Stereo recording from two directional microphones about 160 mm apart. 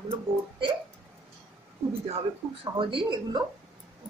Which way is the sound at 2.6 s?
30° right (ahead or behind).